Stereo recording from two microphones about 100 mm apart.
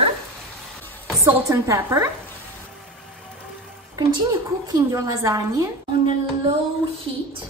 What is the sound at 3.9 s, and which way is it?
Speech, 45° right (ahead or behind).